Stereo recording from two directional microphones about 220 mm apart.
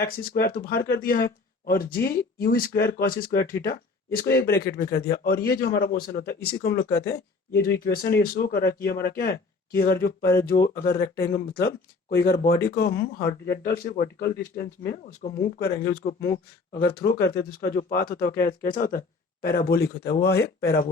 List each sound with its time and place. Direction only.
0.0 s speech: 45° left (ahead or behind)